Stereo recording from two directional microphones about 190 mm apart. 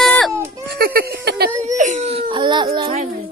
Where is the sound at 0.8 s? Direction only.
50° right (ahead or behind).